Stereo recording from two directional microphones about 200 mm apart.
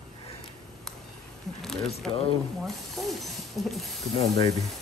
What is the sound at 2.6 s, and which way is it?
Mechanisms, centre (ahead or behind).